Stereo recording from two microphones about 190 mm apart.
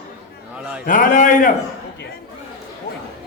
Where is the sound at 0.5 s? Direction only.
5° right (ahead or behind).